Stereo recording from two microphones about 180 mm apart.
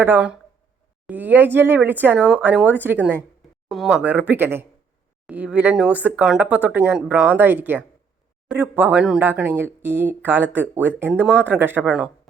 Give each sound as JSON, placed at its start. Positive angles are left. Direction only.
{"t": 0.0, "sound": "speech", "side_deg": -10}